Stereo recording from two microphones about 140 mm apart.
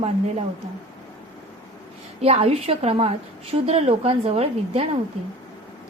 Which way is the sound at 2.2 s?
45° right (ahead or behind).